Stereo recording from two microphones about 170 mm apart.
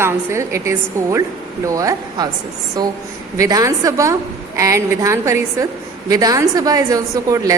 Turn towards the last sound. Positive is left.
turn(degrees=-20)  # may be behind; listen again after turning